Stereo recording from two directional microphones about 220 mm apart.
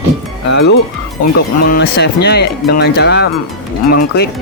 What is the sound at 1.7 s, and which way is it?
Speech, 50° left (ahead or behind).